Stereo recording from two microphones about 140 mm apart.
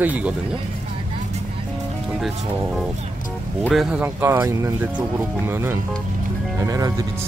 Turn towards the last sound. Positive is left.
turn(degrees=-25)  # may be behind; listen again after turning